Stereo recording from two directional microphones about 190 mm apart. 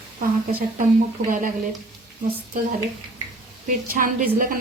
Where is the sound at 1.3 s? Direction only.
45° right (ahead or behind).